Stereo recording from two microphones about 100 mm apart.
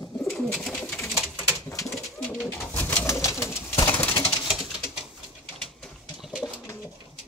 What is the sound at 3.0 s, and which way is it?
Bird, 30° left (ahead or behind).